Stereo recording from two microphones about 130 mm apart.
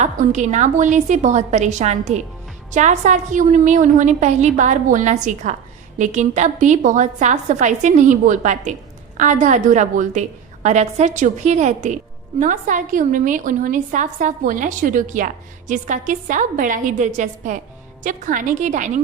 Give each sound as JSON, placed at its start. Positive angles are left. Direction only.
{"t": 0.0, "sound": "a woman's voice", "side_deg": -65}
{"t": 12.4, "sound": "a woman's voice", "side_deg": -85}
{"t": 18.0, "sound": "a woman's voice", "side_deg": -85}